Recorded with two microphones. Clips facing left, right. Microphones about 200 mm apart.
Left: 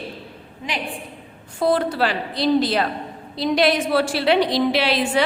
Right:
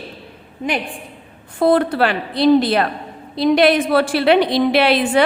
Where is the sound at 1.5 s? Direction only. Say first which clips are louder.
Right 5 dB; 60° right (ahead or behind).